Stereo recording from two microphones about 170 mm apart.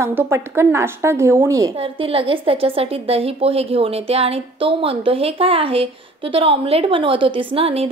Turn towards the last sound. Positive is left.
turn(degrees=-35)  # may be behind; listen again after turning